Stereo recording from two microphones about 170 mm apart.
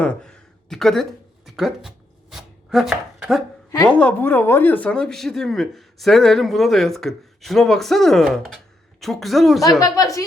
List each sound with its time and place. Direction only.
0.0 s speech: 5° left (ahead or behind)
2.3 s chopping: centre (ahead or behind)
3.8 s speech: 5° left (ahead or behind)
9.8 s a woman's voice: 20° left (ahead or behind)